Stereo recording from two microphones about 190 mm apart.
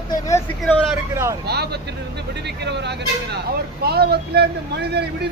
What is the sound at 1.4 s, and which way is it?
Speech, 60° right (ahead or behind).